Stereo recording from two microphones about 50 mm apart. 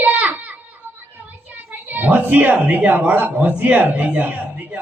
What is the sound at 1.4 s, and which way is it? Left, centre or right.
A woman's voice, right.